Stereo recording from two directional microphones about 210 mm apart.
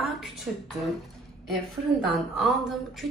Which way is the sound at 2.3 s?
Centre (ahead or behind).